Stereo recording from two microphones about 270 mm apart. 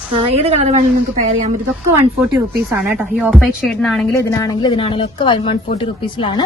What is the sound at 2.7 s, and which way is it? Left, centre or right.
A woman's voice, centre.